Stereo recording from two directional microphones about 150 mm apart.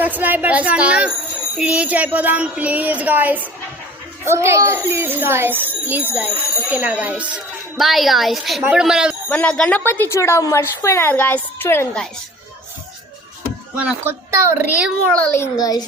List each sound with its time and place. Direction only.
0.0 s a child's voice: 10° right (ahead or behind)
9.3 s a woman's voice: 5° left (ahead or behind)
13.7 s a child's voice: 10° right (ahead or behind)
15.0 s a child's voice: 15° left (ahead or behind)